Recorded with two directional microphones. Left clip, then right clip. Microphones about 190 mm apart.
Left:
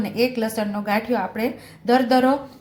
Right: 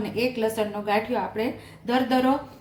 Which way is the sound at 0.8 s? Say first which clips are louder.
Left 3 dB; 40° left (ahead or behind).